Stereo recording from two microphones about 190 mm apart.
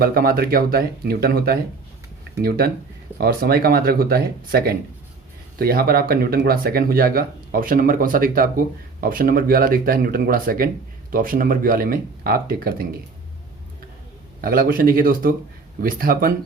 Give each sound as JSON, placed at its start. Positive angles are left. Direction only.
{"t": 0.0, "sound": "speech", "side_deg": -50}
{"t": 14.4, "sound": "speech", "side_deg": -50}